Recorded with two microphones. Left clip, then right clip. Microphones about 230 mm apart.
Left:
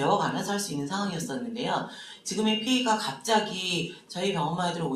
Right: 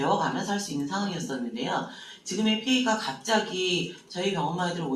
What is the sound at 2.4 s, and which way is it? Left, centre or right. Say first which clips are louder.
Speech: even; left.